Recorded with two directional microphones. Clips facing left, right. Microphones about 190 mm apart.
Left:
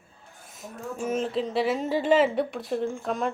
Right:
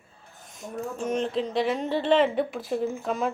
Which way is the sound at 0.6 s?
5° left (ahead or behind).